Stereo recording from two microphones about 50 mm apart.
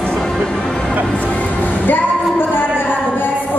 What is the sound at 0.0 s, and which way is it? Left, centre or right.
Music, centre.